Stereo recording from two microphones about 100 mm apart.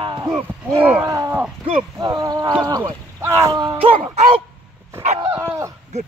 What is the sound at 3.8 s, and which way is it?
Music, 85° right.